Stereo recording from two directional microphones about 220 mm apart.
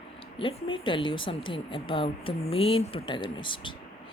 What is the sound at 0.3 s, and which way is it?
Speech, 25° left (ahead or behind).